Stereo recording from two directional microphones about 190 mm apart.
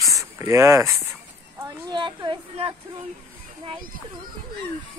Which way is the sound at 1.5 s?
20° right (ahead or behind).